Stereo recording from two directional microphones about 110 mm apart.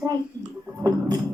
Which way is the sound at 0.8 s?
35° right (ahead or behind).